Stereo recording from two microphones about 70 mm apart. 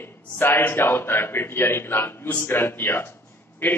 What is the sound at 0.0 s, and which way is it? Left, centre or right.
A man's voice, left.